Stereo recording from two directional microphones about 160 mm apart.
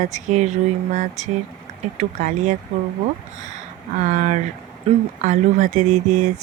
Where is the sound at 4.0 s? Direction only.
50° right (ahead or behind).